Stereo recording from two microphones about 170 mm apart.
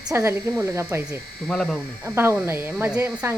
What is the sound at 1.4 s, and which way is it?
Speech, 5° left (ahead or behind).